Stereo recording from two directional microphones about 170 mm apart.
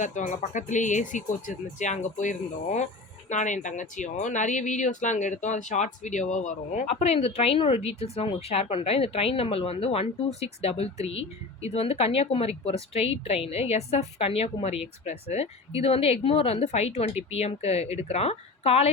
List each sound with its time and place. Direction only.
0.0 s speech: 45° left (ahead or behind)